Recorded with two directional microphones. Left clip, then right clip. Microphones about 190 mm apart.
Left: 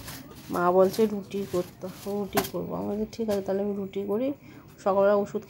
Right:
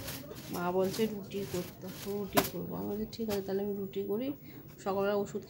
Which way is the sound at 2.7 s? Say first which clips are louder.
Left 7 dB; 5° left (ahead or behind).